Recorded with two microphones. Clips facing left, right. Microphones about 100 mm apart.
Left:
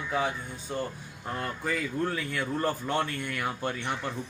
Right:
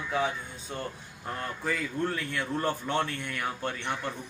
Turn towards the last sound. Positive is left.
turn(degrees=10)  # may be behind; listen again after turning